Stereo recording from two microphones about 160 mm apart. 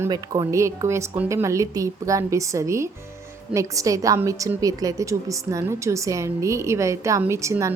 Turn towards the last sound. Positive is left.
turn(degrees=-20)  # may be behind; listen again after turning